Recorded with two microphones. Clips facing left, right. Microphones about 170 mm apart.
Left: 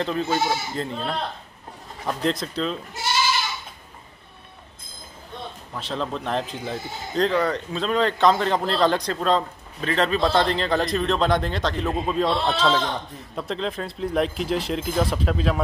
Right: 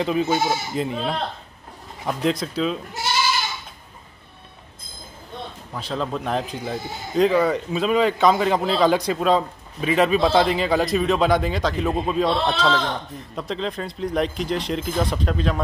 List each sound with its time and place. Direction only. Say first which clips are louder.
0.0 s a man's voice: right 3 dB; 10° right (ahead or behind)
5.8 s a man's voice: right 2 dB; centre (ahead or behind)